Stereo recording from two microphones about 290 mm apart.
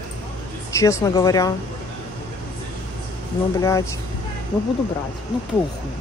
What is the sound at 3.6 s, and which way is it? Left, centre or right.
Speech, centre.